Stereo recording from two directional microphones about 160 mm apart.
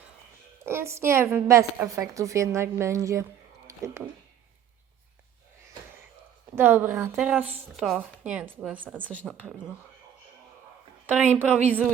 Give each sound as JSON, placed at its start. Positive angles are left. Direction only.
{"t": 0.6, "sound": "a woman's voice", "side_deg": -15}
{"t": 3.7, "sound": "a sound", "side_deg": -20}
{"t": 6.6, "sound": "a woman's voice", "side_deg": -15}
{"t": 9.0, "sound": "speech", "side_deg": 10}
{"t": 11.0, "sound": "a woman's voice", "side_deg": -10}